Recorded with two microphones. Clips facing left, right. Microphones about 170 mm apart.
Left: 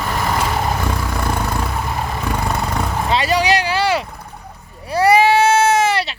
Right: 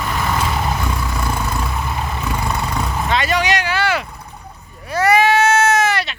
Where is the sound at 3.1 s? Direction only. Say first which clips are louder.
Left 2 dB; 35° left (ahead or behind).